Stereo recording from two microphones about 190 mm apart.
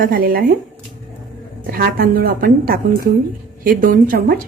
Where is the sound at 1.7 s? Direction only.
55° right (ahead or behind).